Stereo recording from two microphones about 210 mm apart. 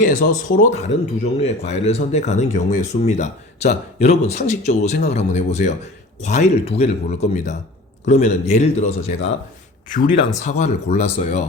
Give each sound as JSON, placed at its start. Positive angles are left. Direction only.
{"t": 0.0, "sound": "speech", "side_deg": 40}
{"t": 10.4, "sound": "speech", "side_deg": 30}